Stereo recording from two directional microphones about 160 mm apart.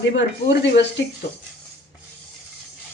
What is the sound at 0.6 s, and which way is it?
Speech, 90° left.